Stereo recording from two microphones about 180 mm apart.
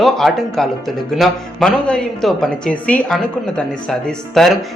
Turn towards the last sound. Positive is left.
turn(degrees=0)  # may be behind; listen again after turning